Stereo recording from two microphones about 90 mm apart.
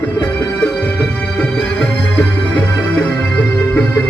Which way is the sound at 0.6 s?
15° left (ahead or behind).